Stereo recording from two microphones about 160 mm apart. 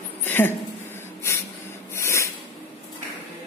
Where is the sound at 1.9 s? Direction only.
15° left (ahead or behind).